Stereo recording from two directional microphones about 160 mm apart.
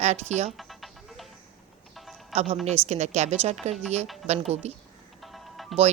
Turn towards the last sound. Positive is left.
turn(degrees=0)  # may be behind; listen again after turning